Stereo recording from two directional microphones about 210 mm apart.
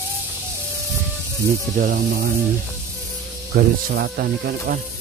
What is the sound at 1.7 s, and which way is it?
Speech, 45° right (ahead or behind).